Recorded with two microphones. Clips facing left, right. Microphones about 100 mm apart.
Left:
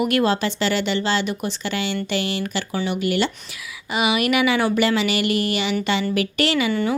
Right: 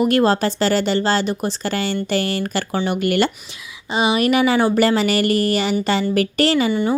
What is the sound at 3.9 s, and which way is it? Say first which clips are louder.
Speech: right 3 dB; 30° right (ahead or behind).